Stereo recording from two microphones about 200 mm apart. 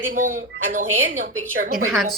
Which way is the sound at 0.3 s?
45° right (ahead or behind).